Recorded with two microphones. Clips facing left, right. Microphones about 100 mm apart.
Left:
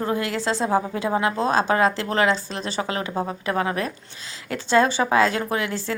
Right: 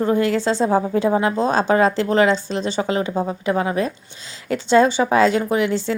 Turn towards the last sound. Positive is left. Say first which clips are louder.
# right 6 dB
turn(degrees=-25)  # may be behind; listen again after turning